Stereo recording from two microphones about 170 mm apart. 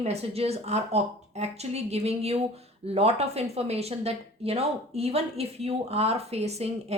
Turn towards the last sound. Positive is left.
turn(degrees=-40)  # may be behind; listen again after turning